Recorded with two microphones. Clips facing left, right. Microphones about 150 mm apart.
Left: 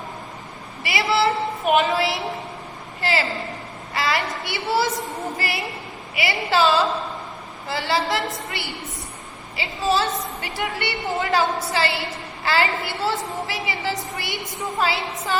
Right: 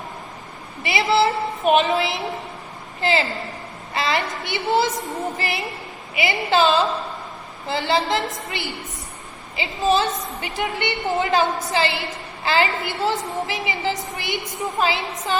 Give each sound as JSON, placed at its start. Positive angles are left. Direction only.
{"t": 0.8, "sound": "a woman's voice", "side_deg": -25}